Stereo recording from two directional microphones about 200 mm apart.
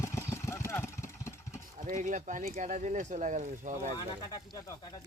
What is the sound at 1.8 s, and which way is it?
Speech, 40° right (ahead or behind).